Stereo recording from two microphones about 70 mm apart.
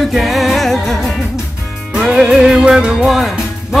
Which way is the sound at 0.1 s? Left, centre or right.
Centre.